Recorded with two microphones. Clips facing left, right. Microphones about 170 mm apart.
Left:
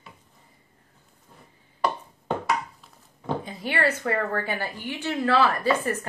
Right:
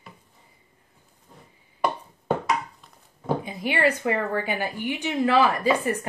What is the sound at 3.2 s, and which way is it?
Speech, 15° right (ahead or behind).